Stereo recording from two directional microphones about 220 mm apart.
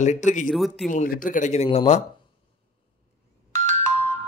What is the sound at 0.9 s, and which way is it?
A man's voice, 35° left (ahead or behind).